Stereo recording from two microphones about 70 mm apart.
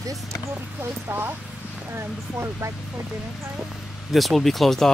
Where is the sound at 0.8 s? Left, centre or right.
Right.